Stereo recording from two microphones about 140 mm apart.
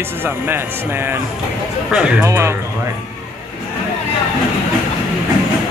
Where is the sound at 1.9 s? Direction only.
5° right (ahead or behind).